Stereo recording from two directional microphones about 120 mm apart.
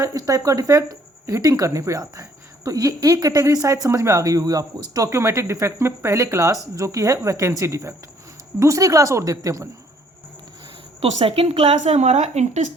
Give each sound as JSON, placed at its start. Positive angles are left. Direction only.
{"t": 0.0, "sound": "speech", "side_deg": -25}
{"t": 11.0, "sound": "a woman's voice", "side_deg": -55}